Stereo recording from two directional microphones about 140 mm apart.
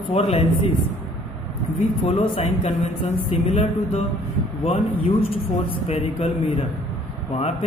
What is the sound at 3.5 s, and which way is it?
Speech, 55° left (ahead or behind).